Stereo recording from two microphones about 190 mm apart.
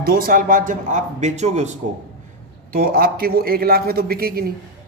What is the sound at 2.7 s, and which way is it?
A man's voice, 50° right (ahead or behind).